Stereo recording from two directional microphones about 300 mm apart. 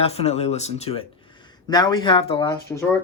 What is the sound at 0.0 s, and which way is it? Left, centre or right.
Speech, left.